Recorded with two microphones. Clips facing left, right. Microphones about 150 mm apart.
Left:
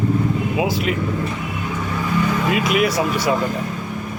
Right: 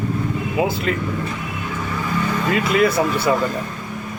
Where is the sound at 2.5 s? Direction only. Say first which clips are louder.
Right 5 dB; 15° left (ahead or behind).